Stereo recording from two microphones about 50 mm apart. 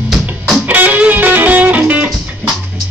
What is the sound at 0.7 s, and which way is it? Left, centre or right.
Music, right.